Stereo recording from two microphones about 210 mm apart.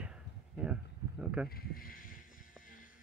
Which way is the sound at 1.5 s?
45° left (ahead or behind).